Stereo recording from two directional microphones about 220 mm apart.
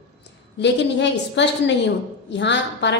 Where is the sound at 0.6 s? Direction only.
55° left (ahead or behind).